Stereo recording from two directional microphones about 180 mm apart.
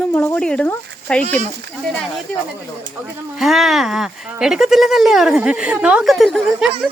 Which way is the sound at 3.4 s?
Centre (ahead or behind).